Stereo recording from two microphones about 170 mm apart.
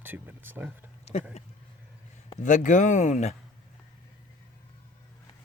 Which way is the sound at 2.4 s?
45° left (ahead or behind).